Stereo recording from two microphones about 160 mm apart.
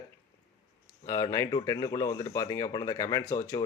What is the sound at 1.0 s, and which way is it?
Speech, 20° left (ahead or behind).